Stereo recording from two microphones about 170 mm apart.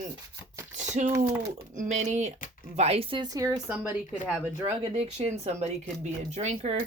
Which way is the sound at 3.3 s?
20° right (ahead or behind).